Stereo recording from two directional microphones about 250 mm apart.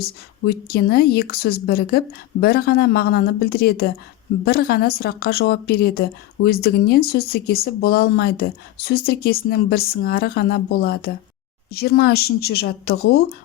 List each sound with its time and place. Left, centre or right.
0.0 s a woman's voice: left